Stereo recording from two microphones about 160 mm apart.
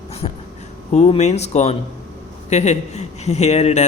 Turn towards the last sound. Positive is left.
turn(degrees=45)  # may be behind; listen again after turning